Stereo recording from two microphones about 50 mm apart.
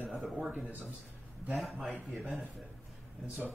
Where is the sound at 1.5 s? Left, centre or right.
Centre.